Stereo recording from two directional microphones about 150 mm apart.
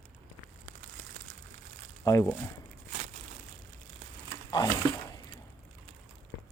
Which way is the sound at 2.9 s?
45° right (ahead or behind).